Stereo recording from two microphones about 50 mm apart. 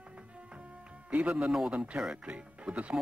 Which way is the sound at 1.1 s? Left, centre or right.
Right.